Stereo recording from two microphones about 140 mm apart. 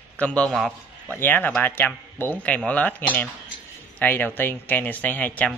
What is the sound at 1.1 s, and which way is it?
A man's voice, 15° left (ahead or behind).